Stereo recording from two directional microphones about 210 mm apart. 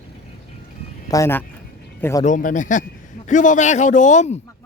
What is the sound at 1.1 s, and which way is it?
Speech, 10° left (ahead or behind).